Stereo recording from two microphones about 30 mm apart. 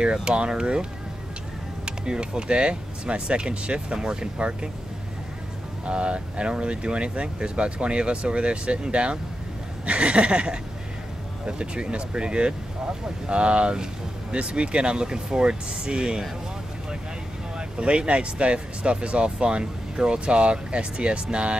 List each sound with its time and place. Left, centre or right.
0.0 s speech: right
1.9 s speech: right
4.4 s speech: right
5.9 s speech: right
17.6 s speech: right